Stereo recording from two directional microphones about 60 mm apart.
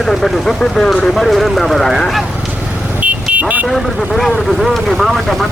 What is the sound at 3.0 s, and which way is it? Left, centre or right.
Vehicle, right.